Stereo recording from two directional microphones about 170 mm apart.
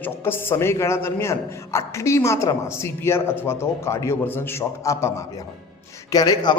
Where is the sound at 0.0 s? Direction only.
15° left (ahead or behind).